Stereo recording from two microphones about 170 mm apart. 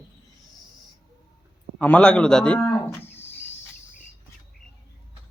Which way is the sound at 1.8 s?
5° left (ahead or behind).